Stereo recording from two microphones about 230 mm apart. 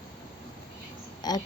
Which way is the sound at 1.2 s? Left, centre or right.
Centre.